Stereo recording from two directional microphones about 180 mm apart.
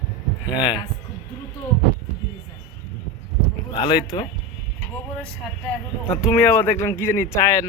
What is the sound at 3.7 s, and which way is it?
Speech, 25° left (ahead or behind).